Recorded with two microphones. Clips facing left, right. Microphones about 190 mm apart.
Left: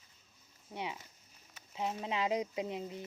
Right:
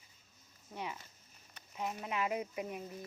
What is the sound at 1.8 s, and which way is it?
Speech, 25° left (ahead or behind).